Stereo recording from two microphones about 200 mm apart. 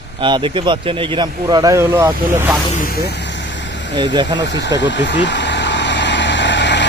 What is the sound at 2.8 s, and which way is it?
Vehicle, 50° left (ahead or behind).